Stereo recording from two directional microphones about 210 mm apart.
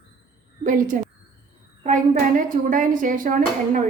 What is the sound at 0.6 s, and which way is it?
Speech, 40° right (ahead or behind).